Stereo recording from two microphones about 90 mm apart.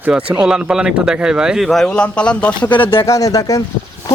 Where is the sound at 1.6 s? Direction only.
5° left (ahead or behind).